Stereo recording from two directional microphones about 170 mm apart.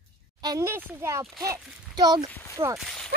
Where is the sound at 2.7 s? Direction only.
5° left (ahead or behind).